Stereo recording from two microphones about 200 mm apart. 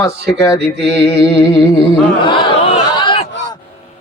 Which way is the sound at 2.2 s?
25° left (ahead or behind).